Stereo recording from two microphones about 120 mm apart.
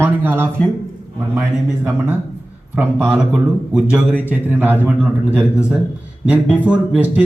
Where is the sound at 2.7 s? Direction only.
10° right (ahead or behind).